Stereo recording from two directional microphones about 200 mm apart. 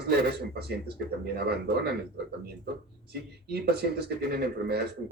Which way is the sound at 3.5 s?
55° right (ahead or behind).